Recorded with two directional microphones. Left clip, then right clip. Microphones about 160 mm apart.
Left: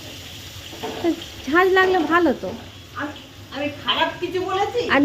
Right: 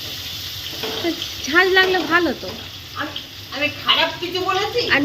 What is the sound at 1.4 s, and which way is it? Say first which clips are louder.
Speech: right 1 dB; 25° left (ahead or behind).